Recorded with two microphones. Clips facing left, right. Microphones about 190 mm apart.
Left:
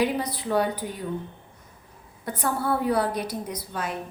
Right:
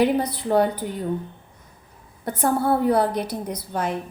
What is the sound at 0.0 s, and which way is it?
Speech, 50° right (ahead or behind).